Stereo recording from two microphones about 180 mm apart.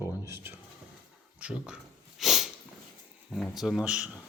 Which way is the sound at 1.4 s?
5° right (ahead or behind).